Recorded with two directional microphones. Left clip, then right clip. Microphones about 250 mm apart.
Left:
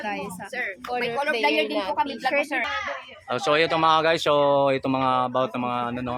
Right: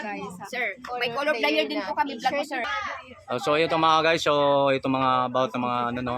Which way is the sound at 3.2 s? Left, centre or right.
Centre.